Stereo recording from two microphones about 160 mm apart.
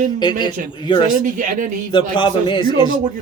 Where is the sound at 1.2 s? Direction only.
55° right (ahead or behind).